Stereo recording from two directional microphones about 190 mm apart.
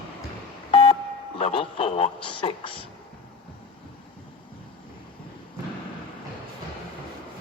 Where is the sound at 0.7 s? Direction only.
30° left (ahead or behind).